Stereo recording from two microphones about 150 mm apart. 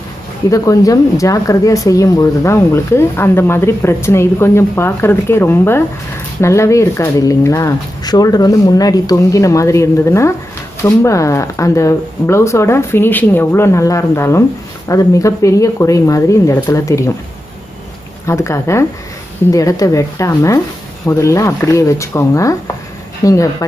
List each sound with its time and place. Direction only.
0.5 s speech: 20° left (ahead or behind)
18.2 s speech: 20° left (ahead or behind)